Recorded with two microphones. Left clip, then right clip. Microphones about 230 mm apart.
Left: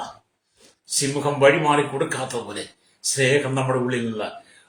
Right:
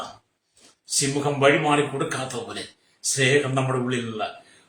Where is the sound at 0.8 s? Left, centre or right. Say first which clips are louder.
Left 1 dB; centre.